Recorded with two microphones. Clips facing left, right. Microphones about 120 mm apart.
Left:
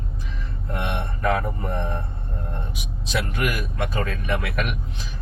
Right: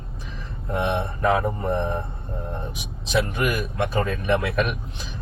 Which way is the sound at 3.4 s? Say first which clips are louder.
Right 2 dB; 25° right (ahead or behind).